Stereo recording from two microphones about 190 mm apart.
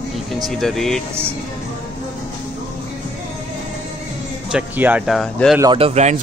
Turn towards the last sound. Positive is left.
turn(degrees=-35)  # may be behind; listen again after turning